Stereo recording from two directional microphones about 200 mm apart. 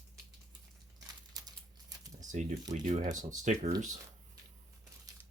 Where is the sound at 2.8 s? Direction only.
40° right (ahead or behind).